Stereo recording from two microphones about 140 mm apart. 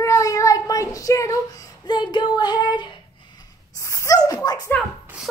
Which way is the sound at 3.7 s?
20° left (ahead or behind).